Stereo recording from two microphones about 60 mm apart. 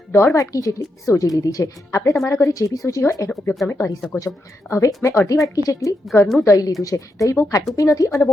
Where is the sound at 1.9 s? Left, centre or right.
Left.